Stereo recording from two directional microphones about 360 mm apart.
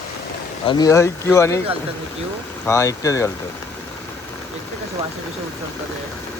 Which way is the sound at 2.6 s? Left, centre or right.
Centre.